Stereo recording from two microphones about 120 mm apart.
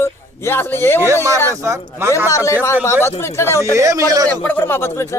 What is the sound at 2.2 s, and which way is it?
Speech, 25° left (ahead or behind).